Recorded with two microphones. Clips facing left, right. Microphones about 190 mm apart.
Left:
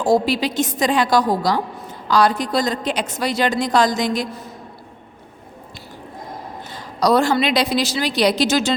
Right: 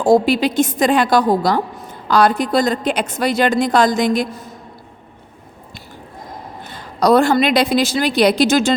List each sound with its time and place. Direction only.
0.0 s a woman's voice: 55° right (ahead or behind)
6.7 s a woman's voice: 55° right (ahead or behind)